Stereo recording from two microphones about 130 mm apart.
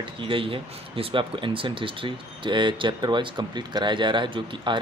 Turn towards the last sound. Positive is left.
turn(degrees=-35)  # may be behind; listen again after turning